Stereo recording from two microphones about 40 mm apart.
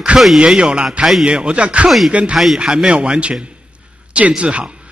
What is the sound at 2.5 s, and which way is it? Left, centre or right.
A man's voice, centre.